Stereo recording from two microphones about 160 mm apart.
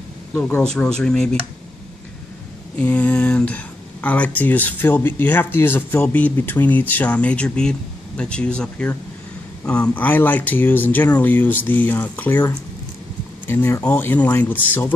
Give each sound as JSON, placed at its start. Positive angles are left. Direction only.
{"t": 0.3, "sound": "speech", "side_deg": 10}
{"t": 2.8, "sound": "speech", "side_deg": 10}